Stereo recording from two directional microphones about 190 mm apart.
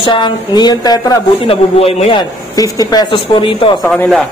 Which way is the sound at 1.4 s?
30° left (ahead or behind).